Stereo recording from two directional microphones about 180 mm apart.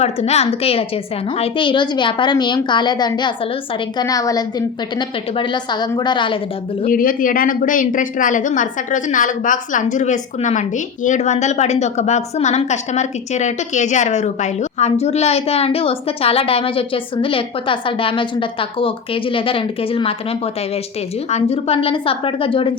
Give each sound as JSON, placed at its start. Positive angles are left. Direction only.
{"t": 0.0, "sound": "a woman's voice", "side_deg": 35}
{"t": 6.8, "sound": "a woman's voice", "side_deg": 50}